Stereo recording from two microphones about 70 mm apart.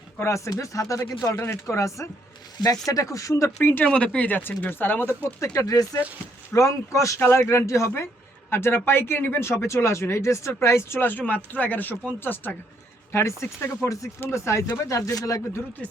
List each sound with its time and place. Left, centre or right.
0.2 s speech: left
1.4 s speech: left
3.6 s speech: left
3.8 s speech: centre; by 5.3 s left
5.5 s speech: left
7.2 s speech: left
15.8 s speech: centre